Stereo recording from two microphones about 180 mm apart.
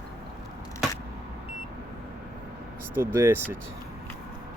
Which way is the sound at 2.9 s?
15° right (ahead or behind).